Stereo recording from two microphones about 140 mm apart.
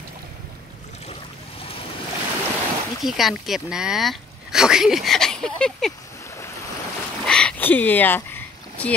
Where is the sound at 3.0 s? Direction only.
Centre (ahead or behind).